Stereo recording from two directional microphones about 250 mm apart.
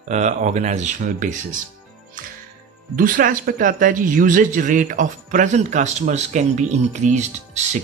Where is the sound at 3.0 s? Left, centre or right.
Right.